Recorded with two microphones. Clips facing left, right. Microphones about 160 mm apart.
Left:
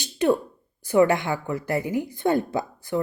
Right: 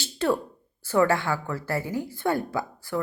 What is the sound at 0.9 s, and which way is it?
A woman's voice, 15° left (ahead or behind).